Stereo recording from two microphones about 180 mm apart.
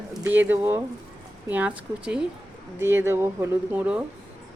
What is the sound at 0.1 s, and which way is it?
Speech, 10° right (ahead or behind).